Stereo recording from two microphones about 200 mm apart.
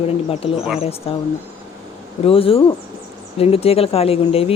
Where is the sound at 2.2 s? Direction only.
30° left (ahead or behind).